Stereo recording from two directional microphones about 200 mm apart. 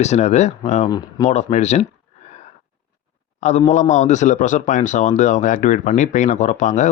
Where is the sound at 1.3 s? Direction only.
35° left (ahead or behind).